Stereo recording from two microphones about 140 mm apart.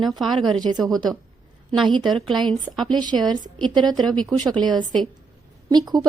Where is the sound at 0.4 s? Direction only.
5° left (ahead or behind).